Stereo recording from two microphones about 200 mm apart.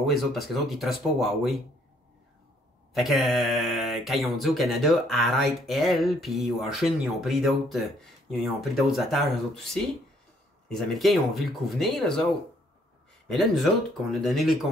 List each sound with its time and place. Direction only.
0.0 s speech: centre (ahead or behind)
2.9 s speech: centre (ahead or behind)
13.3 s speech: centre (ahead or behind)